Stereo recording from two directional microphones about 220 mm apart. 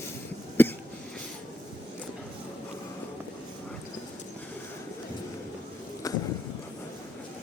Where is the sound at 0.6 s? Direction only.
10° left (ahead or behind).